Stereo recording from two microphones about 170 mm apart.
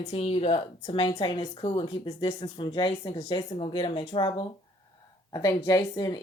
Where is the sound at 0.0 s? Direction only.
40° left (ahead or behind).